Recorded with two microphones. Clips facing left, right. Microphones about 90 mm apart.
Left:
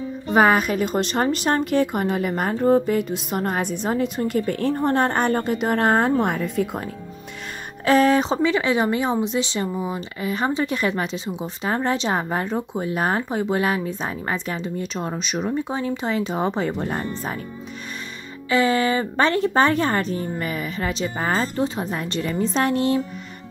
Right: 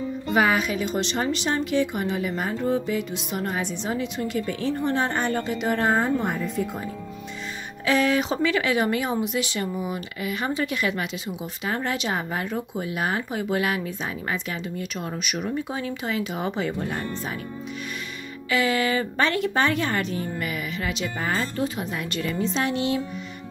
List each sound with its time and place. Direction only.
0.3 s a woman's voice: 45° left (ahead or behind); by 6.8 s 65° left (ahead or behind)
7.8 s speech: 40° left (ahead or behind)
18.5 s speech: 35° left (ahead or behind)